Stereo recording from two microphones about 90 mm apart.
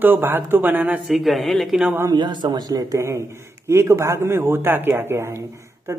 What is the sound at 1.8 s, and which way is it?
Speech, 20° right (ahead or behind).